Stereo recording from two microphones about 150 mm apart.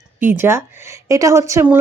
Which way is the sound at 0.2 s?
15° right (ahead or behind).